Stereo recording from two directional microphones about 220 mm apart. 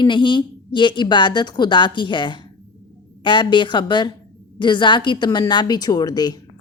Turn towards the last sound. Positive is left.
turn(degrees=20)  # may be behind; listen again after turning